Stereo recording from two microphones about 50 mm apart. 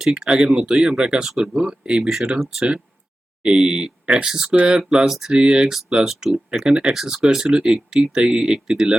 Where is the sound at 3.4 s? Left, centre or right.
Centre.